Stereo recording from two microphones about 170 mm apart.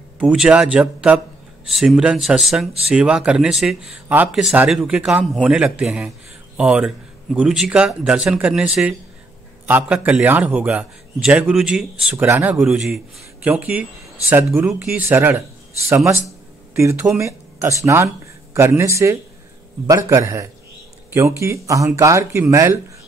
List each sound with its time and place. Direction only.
0.2 s a man's voice: 5° right (ahead or behind)